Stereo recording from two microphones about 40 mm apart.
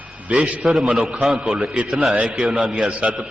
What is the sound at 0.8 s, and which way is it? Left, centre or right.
A man's voice, centre.